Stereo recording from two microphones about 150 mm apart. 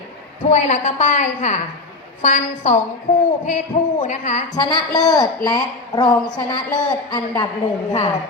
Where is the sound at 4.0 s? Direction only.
50° left (ahead or behind).